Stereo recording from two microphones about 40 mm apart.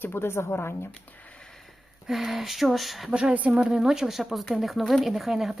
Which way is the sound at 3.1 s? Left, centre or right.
Right.